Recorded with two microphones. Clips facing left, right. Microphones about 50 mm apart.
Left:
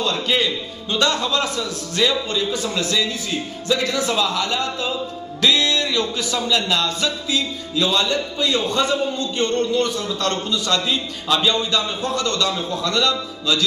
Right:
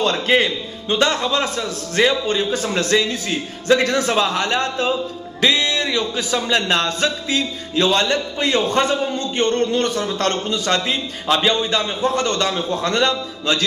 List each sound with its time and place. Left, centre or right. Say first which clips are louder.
0.0 s a man's voice: right 4 dB; right
5.4 s music: even; right
6.3 s a man's voice: right 2 dB; right
7.7 s a man's voice: right 3 dB; right